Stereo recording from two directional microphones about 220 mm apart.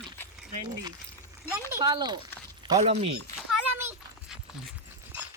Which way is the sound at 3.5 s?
5° right (ahead or behind).